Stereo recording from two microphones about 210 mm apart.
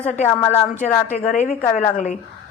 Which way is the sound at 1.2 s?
35° left (ahead or behind).